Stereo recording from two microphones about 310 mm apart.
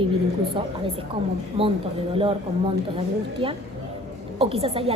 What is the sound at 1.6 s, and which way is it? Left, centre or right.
A woman's voice, centre.